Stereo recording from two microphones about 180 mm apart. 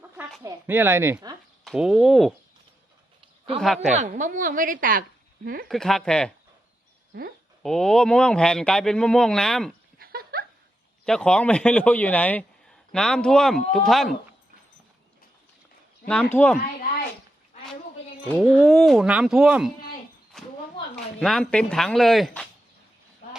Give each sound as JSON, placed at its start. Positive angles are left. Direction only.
{"t": 0.4, "sound": "speech", "side_deg": -10}
{"t": 1.6, "sound": "speech", "side_deg": -5}
{"t": 3.8, "sound": "a woman's voice", "side_deg": -40}
{"t": 5.6, "sound": "speech", "side_deg": 0}
{"t": 7.6, "sound": "speech", "side_deg": 0}
{"t": 10.0, "sound": "a sound", "side_deg": -55}
{"t": 11.0, "sound": "speech", "side_deg": 5}
{"t": 16.0, "sound": "speech", "side_deg": 5}
{"t": 18.3, "sound": "speech", "side_deg": 0}
{"t": 20.3, "sound": "a sound", "side_deg": 0}
{"t": 20.9, "sound": "speech", "side_deg": 0}